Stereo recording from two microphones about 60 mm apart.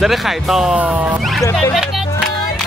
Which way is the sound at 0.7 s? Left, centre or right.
Right.